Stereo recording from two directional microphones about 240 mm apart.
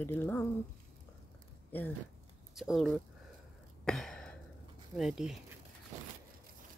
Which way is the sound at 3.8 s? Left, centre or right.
Centre.